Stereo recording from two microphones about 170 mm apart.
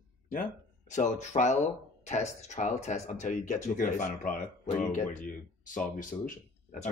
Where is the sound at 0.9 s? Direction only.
45° left (ahead or behind).